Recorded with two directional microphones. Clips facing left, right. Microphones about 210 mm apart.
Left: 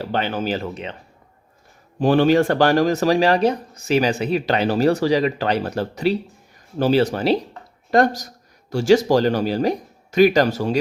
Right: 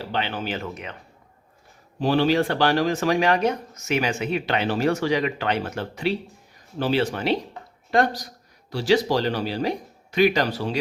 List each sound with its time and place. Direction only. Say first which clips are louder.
0.0 s speech: left 5 dB; 45° left (ahead or behind); by 0.9 s 30° left (ahead or behind)
2.0 s speech: left 5 dB; 50° left (ahead or behind)